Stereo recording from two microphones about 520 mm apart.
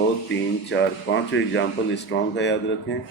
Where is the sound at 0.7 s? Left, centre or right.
Left.